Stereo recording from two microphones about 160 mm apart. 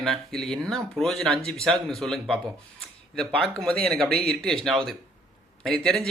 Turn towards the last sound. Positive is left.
turn(degrees=5)  # may be behind; listen again after turning